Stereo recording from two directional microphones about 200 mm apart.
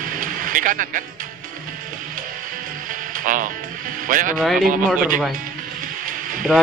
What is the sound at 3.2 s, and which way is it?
Music, 40° right (ahead or behind).